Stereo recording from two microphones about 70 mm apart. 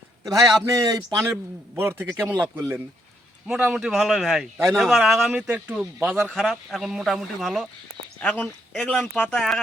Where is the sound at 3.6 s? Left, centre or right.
Centre.